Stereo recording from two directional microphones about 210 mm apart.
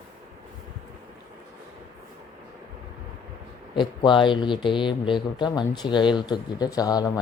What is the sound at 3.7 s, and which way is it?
Speech, 20° left (ahead or behind).